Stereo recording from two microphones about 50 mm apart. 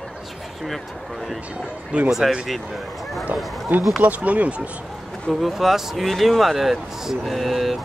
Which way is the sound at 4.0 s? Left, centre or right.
Right.